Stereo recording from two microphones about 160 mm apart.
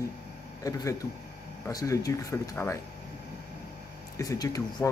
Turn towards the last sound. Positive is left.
turn(degrees=20)  # may be behind; listen again after turning